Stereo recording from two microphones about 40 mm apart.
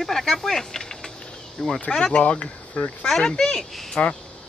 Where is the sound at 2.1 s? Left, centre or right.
Left.